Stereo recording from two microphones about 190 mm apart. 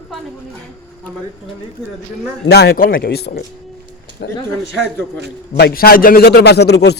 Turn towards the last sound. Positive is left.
turn(degrees=60)  # may be behind; listen again after turning